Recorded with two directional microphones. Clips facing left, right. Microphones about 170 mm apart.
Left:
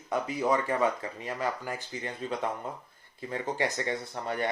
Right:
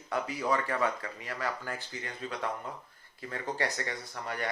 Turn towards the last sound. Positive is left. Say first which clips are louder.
# left 5 dB
turn(degrees=25)  # may be behind; listen again after turning